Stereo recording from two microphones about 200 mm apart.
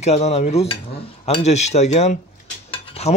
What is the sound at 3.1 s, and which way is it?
Rub, 15° left (ahead or behind).